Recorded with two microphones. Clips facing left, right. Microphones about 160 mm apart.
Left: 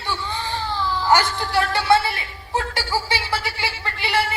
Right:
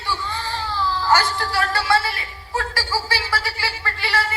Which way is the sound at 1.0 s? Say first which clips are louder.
Left 1 dB; 20° left (ahead or behind).